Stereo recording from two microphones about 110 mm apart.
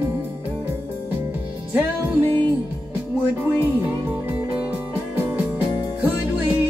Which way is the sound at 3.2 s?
15° right (ahead or behind).